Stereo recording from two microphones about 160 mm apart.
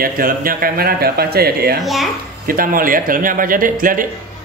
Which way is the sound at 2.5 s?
60° right (ahead or behind).